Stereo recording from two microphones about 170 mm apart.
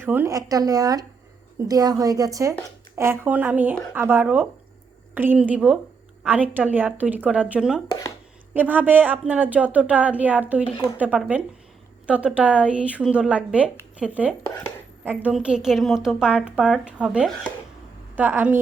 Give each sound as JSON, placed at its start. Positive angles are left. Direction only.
{"t": 0.0, "sound": "a woman's voice", "side_deg": -10}